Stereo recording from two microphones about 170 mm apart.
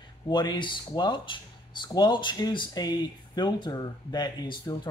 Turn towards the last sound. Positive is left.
turn(degrees=25)  # may be behind; listen again after turning